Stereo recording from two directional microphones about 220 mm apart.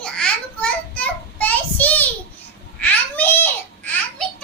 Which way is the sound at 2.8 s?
10° left (ahead or behind).